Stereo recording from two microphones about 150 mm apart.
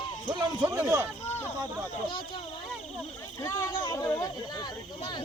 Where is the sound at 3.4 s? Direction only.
20° left (ahead or behind).